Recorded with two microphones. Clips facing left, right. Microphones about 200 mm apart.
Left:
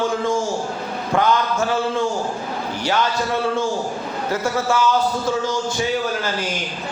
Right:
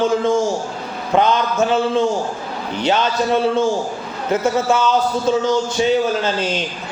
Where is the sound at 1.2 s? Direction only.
20° right (ahead or behind).